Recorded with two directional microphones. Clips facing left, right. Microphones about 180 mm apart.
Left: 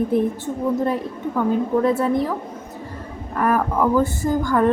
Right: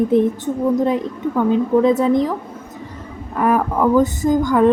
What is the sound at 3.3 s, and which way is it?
Speech, 15° right (ahead or behind).